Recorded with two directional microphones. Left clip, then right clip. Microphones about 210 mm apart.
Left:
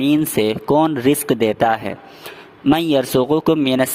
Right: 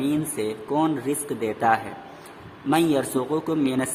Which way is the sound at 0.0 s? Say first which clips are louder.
Left 9 dB; 45° left (ahead or behind).